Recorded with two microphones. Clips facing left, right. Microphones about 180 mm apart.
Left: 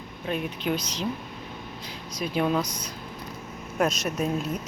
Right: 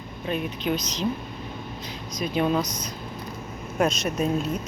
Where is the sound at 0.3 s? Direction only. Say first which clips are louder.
Right 1 dB; 10° left (ahead or behind).